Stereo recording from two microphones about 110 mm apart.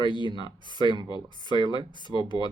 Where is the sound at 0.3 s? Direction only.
45° left (ahead or behind).